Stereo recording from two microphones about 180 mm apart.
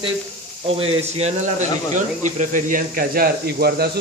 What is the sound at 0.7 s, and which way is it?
Speech, 35° right (ahead or behind).